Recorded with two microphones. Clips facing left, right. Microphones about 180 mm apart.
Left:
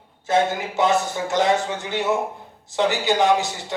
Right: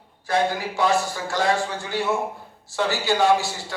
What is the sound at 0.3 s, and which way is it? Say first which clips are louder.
A man's voice: left 2 dB; 20° left (ahead or behind).